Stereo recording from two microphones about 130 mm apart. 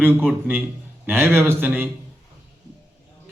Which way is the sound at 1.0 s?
20° right (ahead or behind).